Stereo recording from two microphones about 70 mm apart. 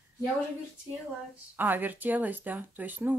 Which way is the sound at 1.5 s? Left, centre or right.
Right.